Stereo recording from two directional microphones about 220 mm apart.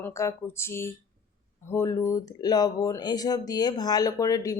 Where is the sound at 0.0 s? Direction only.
15° left (ahead or behind).